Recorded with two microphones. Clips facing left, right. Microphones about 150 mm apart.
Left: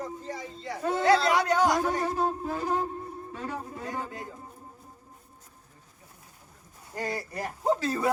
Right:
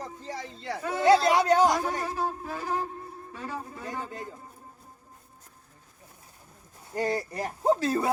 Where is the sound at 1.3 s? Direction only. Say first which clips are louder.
Right 2 dB; 25° right (ahead or behind).